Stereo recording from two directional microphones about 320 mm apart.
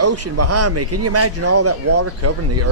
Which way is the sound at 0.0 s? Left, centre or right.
Right.